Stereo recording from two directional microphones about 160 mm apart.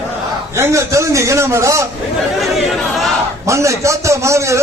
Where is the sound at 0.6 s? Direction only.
20° right (ahead or behind).